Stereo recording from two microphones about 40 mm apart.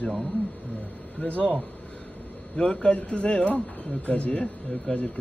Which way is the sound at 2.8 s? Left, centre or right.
Left.